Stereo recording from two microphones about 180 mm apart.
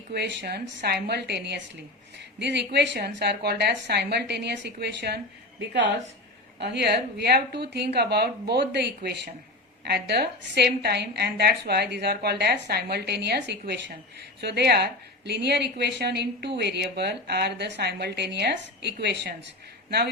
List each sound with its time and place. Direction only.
0.1 s a woman's voice: 65° right (ahead or behind)